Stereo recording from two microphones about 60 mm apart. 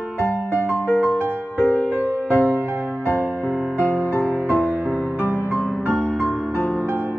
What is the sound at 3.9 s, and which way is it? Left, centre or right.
Music, right.